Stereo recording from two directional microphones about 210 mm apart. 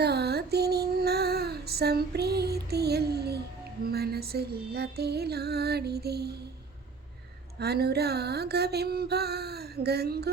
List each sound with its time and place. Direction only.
0.0 s female singing: 50° right (ahead or behind)
3.8 s music: 50° right (ahead or behind)
7.6 s music: 50° right (ahead or behind)